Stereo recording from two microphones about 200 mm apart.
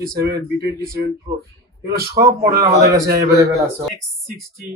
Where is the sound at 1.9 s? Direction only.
50° right (ahead or behind).